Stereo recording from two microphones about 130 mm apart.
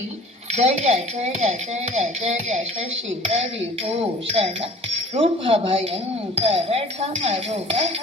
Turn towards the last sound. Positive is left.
turn(degrees=-50)  # may be behind; listen again after turning